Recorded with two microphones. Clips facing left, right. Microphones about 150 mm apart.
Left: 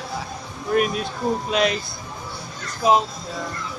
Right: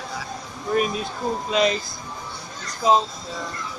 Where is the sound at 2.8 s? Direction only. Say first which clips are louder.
Left 1 dB; 15° left (ahead or behind).